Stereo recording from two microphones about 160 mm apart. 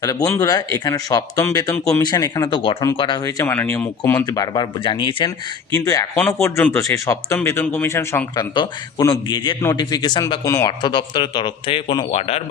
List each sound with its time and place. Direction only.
0.0 s speech: 20° left (ahead or behind)
3.2 s speech: 15° left (ahead or behind); by 5.3 s 30° left (ahead or behind)
5.8 s speech: 20° left (ahead or behind)
6.2 s speech: 5° left (ahead or behind)
6.7 s speech: 20° left (ahead or behind)